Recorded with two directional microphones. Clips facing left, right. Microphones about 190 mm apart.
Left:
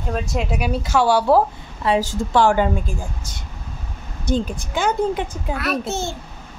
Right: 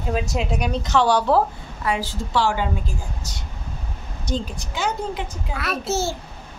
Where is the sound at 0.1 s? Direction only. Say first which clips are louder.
Even; centre (ahead or behind).